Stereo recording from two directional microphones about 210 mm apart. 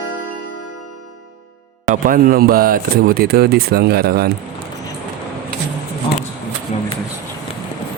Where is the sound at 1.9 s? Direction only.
40° right (ahead or behind).